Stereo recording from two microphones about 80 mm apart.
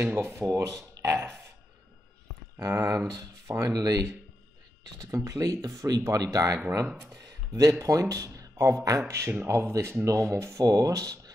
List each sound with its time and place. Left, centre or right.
0.0 s speech: right
2.6 s speech: right
7.8 s speech: right
10.6 s speech: right